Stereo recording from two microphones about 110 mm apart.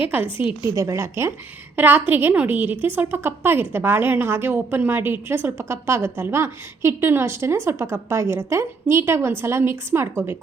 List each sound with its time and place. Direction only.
0.1 s a woman's voice: 20° right (ahead or behind)
0.6 s a woman's voice: 30° right (ahead or behind)